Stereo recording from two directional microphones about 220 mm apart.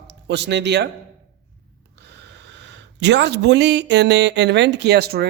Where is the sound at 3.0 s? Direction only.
50° right (ahead or behind).